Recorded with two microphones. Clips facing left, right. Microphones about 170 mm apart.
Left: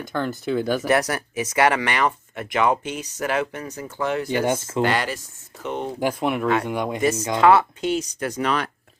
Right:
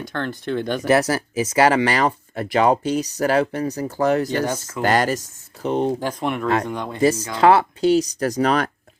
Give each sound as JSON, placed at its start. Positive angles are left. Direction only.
{"t": 0.1, "sound": "speech", "side_deg": 5}
{"t": 0.9, "sound": "speech", "side_deg": -25}
{"t": 4.4, "sound": "speech", "side_deg": 20}
{"t": 4.8, "sound": "speech", "side_deg": -45}
{"t": 6.0, "sound": "speech", "side_deg": 10}
{"t": 7.0, "sound": "speech", "side_deg": -30}